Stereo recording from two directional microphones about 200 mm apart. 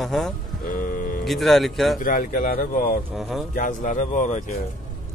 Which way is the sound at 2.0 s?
45° left (ahead or behind).